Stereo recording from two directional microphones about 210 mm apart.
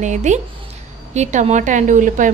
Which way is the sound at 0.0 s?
35° right (ahead or behind).